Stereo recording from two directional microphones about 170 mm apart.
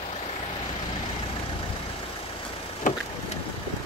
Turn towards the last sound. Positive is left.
turn(degrees=55)  # may be behind; listen again after turning